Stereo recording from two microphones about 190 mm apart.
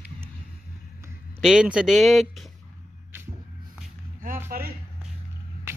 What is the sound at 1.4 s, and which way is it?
Speech, centre (ahead or behind).